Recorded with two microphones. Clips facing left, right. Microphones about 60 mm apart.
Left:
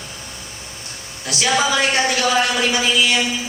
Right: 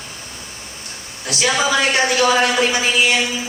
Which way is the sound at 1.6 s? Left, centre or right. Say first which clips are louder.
Right 1 dB; right.